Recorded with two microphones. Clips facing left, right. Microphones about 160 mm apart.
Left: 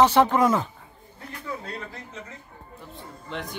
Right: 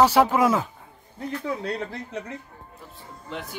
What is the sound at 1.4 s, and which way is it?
Speech, 75° right (ahead or behind).